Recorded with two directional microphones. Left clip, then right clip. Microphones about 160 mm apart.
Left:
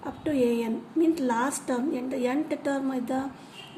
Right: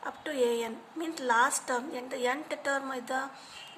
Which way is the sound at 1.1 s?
30° right (ahead or behind).